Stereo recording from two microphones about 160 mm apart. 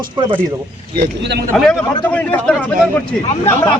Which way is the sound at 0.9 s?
85° right.